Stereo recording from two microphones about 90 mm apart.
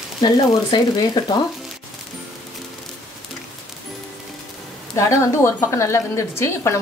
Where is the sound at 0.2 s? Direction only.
55° left (ahead or behind).